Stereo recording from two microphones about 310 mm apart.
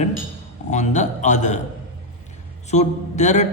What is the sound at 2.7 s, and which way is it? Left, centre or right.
Speech, left.